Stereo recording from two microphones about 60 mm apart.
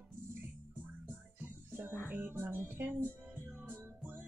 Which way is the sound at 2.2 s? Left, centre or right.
Right.